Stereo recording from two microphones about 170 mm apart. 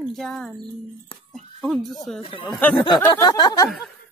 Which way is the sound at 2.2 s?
30° left (ahead or behind).